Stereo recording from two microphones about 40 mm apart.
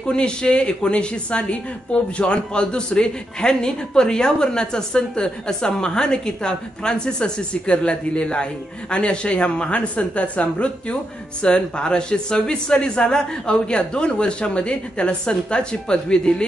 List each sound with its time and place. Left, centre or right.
0.0 s speech: left